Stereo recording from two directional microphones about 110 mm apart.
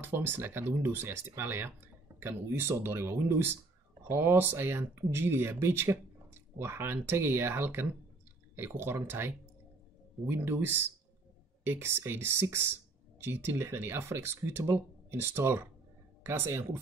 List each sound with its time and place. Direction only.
0.0 s speech: 20° right (ahead or behind)